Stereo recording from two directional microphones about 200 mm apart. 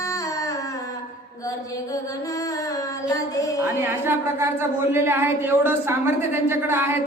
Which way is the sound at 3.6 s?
10° right (ahead or behind).